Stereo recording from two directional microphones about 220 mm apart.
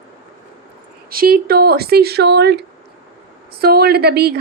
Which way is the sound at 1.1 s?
40° right (ahead or behind).